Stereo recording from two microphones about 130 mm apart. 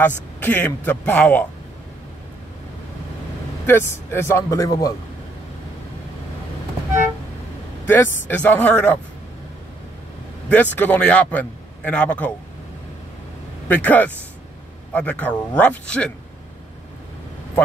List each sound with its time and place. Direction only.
0.0 s a man's voice: 15° left (ahead or behind)
3.6 s speech: 20° left (ahead or behind)
7.8 s a man's voice: 15° left (ahead or behind)
10.5 s a man's voice: 15° left (ahead or behind)
13.7 s a man's voice: 10° left (ahead or behind)